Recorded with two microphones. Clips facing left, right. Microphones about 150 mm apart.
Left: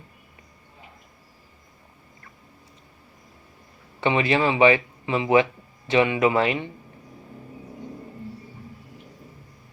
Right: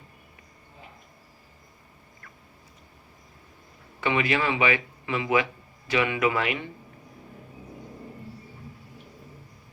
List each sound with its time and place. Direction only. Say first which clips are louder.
4.0 s speech: left 4 dB; 30° left (ahead or behind)